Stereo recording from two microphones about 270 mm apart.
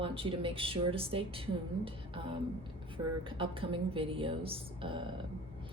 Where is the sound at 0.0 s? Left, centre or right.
Centre.